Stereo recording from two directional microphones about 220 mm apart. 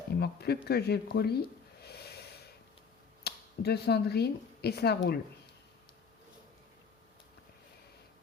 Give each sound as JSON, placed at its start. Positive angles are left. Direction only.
{"t": 0.2, "sound": "speech", "side_deg": 45}
{"t": 1.8, "sound": "snort", "side_deg": 45}
{"t": 3.2, "sound": "speech", "side_deg": 45}